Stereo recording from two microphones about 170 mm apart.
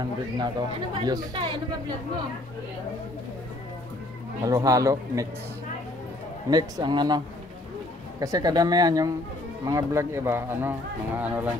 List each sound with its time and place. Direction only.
0.0 s speech: 25° right (ahead or behind)
4.5 s speech: 20° right (ahead or behind)
6.5 s speech: 25° right (ahead or behind)
8.2 s speech: 20° right (ahead or behind)